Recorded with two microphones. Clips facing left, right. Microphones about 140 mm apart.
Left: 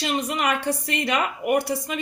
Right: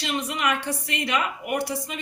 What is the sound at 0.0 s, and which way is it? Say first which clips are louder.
A woman's voice: left 2 dB; 45° left (ahead or behind).